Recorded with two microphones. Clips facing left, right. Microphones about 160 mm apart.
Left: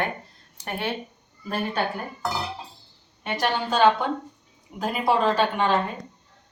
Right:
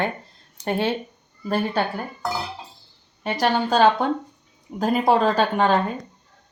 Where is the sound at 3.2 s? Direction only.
35° right (ahead or behind).